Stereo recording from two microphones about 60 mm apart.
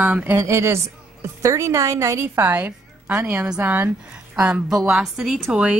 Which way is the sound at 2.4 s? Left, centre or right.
Right.